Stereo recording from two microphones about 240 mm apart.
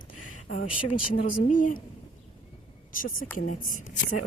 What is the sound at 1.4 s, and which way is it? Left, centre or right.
Speech, left.